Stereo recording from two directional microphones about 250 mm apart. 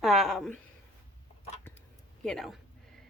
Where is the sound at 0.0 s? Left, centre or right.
Centre.